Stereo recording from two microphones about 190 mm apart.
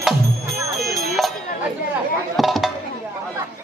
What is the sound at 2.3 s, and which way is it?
Chop, centre (ahead or behind).